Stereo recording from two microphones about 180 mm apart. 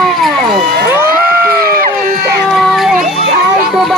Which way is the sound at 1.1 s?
50° right (ahead or behind).